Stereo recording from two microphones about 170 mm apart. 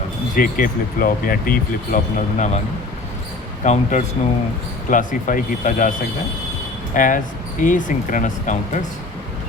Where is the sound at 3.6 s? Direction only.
45° left (ahead or behind).